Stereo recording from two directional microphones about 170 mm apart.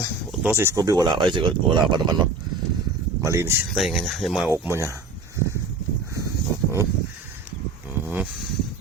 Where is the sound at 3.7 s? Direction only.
Centre (ahead or behind).